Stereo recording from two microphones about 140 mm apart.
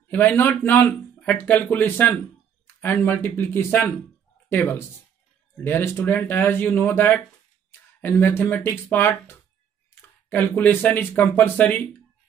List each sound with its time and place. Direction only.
0.1 s speech: 15° left (ahead or behind)